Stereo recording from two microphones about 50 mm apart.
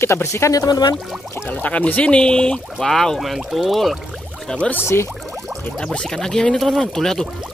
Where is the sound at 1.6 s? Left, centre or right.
Left; by 3.9 s centre.